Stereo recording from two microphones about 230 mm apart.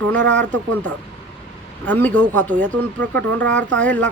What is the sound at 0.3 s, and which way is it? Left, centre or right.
Speech, right.